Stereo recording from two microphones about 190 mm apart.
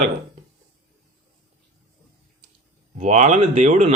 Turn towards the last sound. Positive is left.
turn(degrees=-40)  # may be behind; listen again after turning